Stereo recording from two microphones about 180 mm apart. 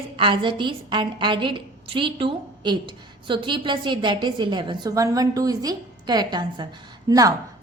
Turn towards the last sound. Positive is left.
turn(degrees=-20)  # may be behind; listen again after turning